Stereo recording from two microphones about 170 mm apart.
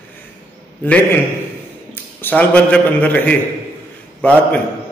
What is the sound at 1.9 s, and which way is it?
A man's voice, 10° left (ahead or behind).